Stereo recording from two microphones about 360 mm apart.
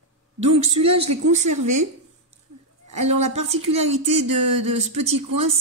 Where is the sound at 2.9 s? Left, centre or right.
Right.